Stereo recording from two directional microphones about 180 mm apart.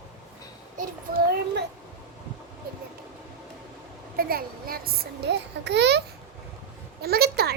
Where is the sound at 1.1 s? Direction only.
60° right (ahead or behind).